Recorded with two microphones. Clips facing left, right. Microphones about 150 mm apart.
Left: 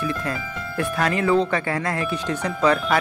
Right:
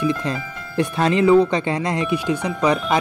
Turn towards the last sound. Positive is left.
turn(degrees=-20)  # may be behind; listen again after turning